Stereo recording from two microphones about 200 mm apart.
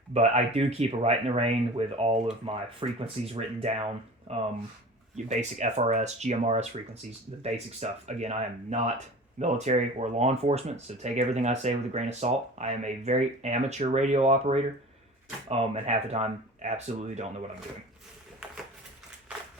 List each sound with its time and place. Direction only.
0.1 s speech: 35° right (ahead or behind)